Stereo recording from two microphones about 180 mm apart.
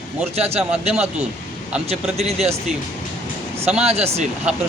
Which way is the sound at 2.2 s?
35° right (ahead or behind).